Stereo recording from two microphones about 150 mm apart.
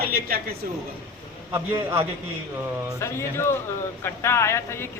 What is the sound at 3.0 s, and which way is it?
Speech, 15° left (ahead or behind).